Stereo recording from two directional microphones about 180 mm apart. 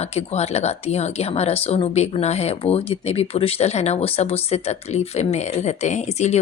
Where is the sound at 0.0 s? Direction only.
35° left (ahead or behind).